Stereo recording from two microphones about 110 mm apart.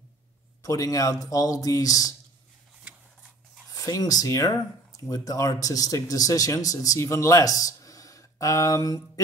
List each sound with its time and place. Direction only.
0.6 s speech: 30° left (ahead or behind)
3.7 s speech: 35° left (ahead or behind)